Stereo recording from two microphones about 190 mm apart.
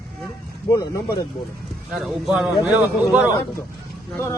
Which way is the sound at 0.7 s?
25° left (ahead or behind).